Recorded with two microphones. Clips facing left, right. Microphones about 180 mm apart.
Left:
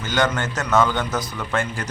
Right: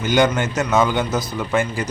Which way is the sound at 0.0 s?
15° right (ahead or behind).